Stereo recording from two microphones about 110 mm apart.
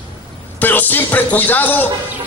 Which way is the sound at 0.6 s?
15° left (ahead or behind).